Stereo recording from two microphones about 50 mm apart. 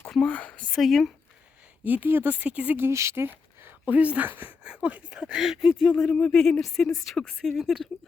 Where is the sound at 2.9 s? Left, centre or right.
Right.